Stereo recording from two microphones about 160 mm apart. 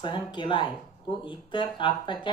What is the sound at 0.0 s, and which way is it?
Speech, 30° left (ahead or behind).